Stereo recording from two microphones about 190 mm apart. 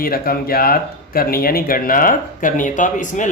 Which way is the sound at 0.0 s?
50° left (ahead or behind).